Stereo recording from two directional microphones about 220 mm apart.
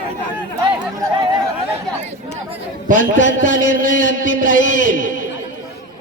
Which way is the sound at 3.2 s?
60° left (ahead or behind).